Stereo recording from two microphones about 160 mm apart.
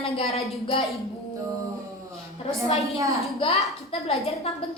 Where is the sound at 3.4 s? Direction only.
40° left (ahead or behind).